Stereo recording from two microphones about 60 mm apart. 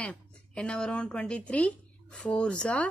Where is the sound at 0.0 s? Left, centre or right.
Centre.